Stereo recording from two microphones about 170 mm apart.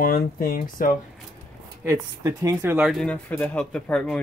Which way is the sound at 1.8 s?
15° right (ahead or behind).